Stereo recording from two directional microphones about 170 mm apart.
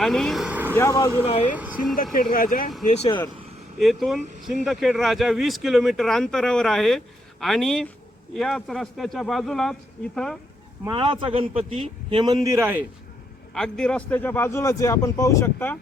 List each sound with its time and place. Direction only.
0.0 s speech: centre (ahead or behind)
0.8 s a man's voice: 15° left (ahead or behind)
1.5 s speech: 10° right (ahead or behind)
2.3 s speech: 60° left (ahead or behind)
2.8 s speech: 40° left (ahead or behind)
3.8 s speech: centre (ahead or behind)
10.8 s a man's voice: 30° right (ahead or behind); by 12.8 s 15° right (ahead or behind)
13.5 s a man's voice: 5° left (ahead or behind)